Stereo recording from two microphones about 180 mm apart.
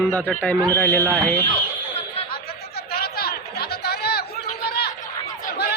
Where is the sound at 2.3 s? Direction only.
60° left (ahead or behind).